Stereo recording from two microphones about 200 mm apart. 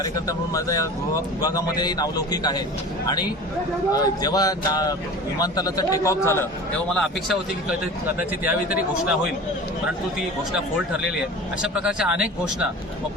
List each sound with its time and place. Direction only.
0.0 s a man's voice: 15° left (ahead or behind); by 9.1 s 10° right (ahead or behind)
11.6 s a man's voice: 5° right (ahead or behind)